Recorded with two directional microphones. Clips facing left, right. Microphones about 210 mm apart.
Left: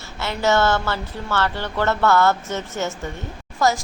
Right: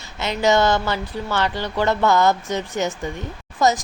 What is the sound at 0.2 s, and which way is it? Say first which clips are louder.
A woman's voice: right 2 dB; 15° right (ahead or behind).